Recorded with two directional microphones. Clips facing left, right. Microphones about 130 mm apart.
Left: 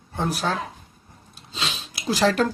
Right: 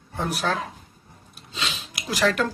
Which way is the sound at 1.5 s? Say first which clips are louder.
Left 1 dB; 30° left (ahead or behind).